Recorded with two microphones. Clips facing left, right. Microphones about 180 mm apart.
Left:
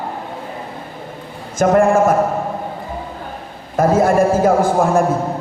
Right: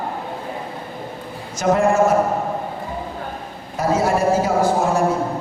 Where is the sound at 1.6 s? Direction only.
50° left (ahead or behind).